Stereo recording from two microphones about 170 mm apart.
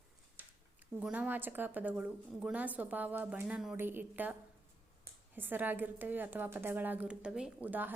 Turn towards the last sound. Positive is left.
turn(degrees=-10)  # may be behind; listen again after turning